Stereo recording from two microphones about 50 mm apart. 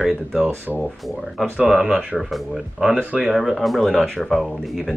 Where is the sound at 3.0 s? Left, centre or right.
Right.